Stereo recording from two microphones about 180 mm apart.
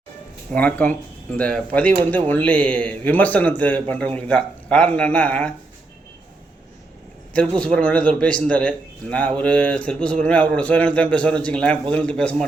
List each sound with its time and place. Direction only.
0.5 s a man's voice: 10° left (ahead or behind)
7.6 s a man's voice: 5° left (ahead or behind)